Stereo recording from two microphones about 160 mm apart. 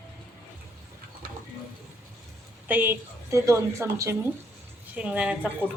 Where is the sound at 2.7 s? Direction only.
10° right (ahead or behind).